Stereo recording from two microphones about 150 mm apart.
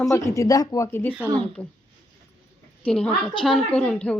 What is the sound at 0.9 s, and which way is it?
Speech, 15° left (ahead or behind).